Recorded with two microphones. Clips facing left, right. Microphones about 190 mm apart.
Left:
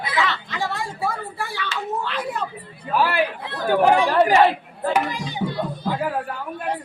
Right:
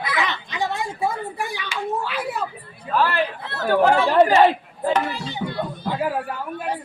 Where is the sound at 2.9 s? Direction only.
10° left (ahead or behind).